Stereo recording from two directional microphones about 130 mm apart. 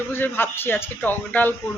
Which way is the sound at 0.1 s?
15° left (ahead or behind).